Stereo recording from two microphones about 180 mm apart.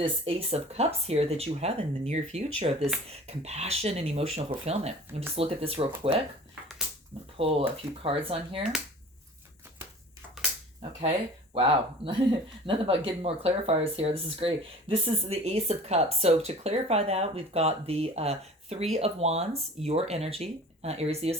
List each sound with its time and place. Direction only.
0.0 s speech: 30° right (ahead or behind)
7.4 s speech: 30° right (ahead or behind)
11.5 s speech: 30° right (ahead or behind)